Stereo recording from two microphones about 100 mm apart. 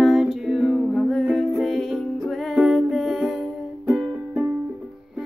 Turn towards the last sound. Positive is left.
turn(degrees=-15)  # may be behind; listen again after turning